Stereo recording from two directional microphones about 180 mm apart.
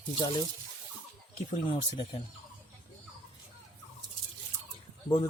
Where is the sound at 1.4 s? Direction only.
30° left (ahead or behind).